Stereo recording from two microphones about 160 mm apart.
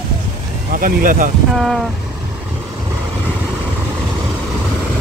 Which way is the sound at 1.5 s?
Centre (ahead or behind).